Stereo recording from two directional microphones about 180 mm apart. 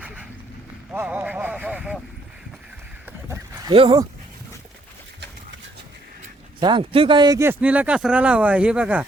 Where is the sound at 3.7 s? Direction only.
30° right (ahead or behind).